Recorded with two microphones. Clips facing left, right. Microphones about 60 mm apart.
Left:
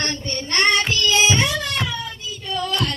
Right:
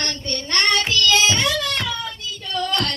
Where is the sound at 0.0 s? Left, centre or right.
Left.